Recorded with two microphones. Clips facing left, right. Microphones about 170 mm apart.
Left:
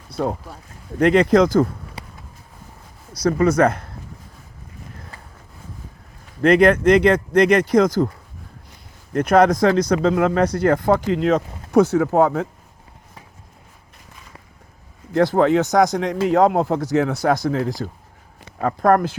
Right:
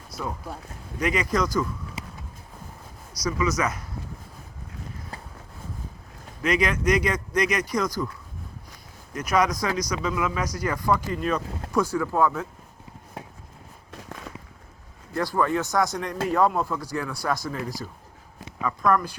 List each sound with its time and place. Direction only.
0.9 s speech: 60° left (ahead or behind)
3.2 s speech: 55° left (ahead or behind)
6.4 s speech: 55° left (ahead or behind)
15.1 s speech: 75° left (ahead or behind)
15.7 s a man's voice: 85° left
17.2 s speech: 70° left (ahead or behind)
18.6 s speech: 55° left (ahead or behind)